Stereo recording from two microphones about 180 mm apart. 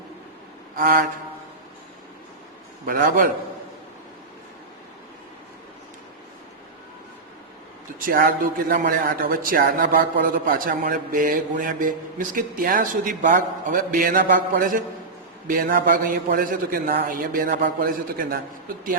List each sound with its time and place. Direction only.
0.8 s speech: 50° right (ahead or behind)
2.8 s speech: 50° right (ahead or behind)
7.9 s speech: 55° right (ahead or behind)
15.4 s speech: 50° right (ahead or behind)